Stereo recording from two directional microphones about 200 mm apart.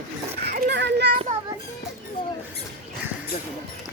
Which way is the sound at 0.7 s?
60° right (ahead or behind).